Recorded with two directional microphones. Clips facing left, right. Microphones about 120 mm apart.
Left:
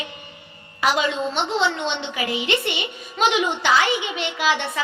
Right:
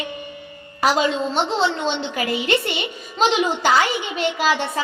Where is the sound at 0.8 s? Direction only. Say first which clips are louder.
Right 2 dB; 35° right (ahead or behind).